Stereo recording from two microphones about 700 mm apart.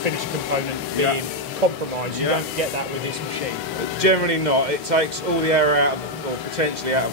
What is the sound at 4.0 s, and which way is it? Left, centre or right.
Speech, right.